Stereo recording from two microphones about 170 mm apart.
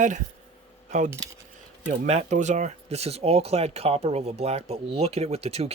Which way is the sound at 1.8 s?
40° right (ahead or behind).